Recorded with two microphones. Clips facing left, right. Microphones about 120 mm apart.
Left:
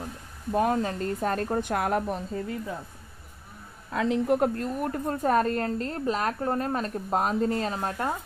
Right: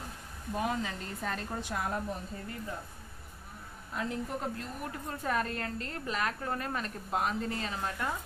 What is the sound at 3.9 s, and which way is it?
A woman's voice, 90° left.